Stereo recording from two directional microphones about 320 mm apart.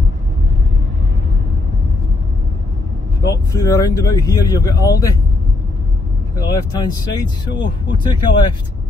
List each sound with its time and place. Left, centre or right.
3.2 s speech: centre
6.3 s speech: centre